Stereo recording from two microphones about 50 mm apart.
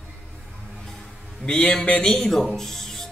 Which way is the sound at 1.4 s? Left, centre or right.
Centre.